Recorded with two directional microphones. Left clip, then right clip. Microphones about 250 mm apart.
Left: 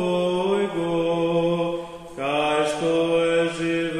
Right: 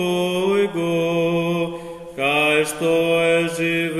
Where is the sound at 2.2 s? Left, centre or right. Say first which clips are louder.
Right 4 dB; right.